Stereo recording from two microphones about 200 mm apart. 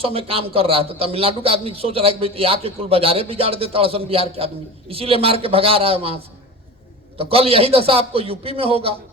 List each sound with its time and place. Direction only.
0.0 s a man's voice: 30° right (ahead or behind)
7.2 s a man's voice: 30° right (ahead or behind)